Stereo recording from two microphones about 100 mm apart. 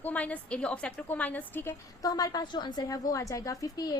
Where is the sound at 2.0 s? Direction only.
40° left (ahead or behind).